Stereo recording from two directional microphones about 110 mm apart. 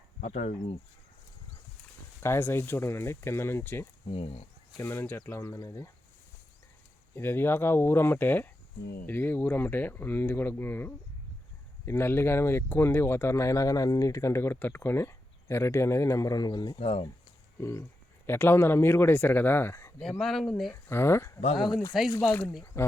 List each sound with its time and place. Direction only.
0.2 s speech: 75° left (ahead or behind)
2.2 s speech: 20° left (ahead or behind)
4.1 s speech: 70° left (ahead or behind)
4.8 s speech: 25° left (ahead or behind)
7.2 s speech: 20° left (ahead or behind); by 16.7 s 40° left (ahead or behind)
16.7 s speech: 65° left (ahead or behind)
17.6 s speech: 25° left (ahead or behind)
20.0 s speech: 5° left (ahead or behind)
20.8 s speech: 20° left (ahead or behind)
21.9 s speech: centre (ahead or behind)
22.3 s speech: 15° left (ahead or behind)